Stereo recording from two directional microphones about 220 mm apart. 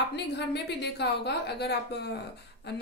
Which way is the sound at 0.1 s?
50° left (ahead or behind).